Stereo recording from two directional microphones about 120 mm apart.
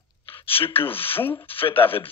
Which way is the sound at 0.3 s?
50° left (ahead or behind).